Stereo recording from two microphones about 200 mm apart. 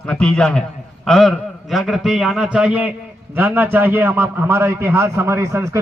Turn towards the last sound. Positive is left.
turn(degrees=-15)  # may be behind; listen again after turning